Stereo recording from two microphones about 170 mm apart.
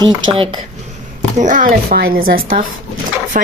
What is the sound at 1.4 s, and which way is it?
Speech, 50° right (ahead or behind).